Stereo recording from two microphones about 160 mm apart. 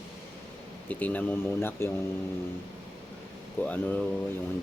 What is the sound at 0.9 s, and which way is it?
Speech, 10° left (ahead or behind).